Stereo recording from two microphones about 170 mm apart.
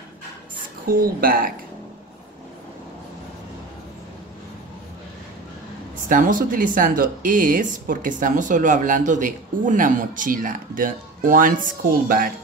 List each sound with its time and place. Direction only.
0.8 s speech: 55° right (ahead or behind)
6.0 s speech: 55° right (ahead or behind)